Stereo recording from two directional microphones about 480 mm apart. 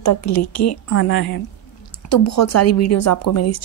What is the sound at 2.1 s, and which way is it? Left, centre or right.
Speech, left.